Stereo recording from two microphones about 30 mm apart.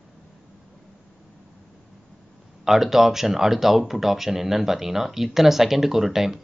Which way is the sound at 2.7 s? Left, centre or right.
Centre.